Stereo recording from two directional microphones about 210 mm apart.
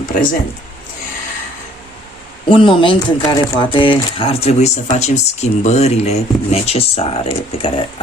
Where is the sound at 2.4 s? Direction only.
25° left (ahead or behind).